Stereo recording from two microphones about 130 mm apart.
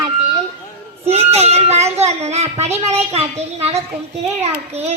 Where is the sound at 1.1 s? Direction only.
55° right (ahead or behind).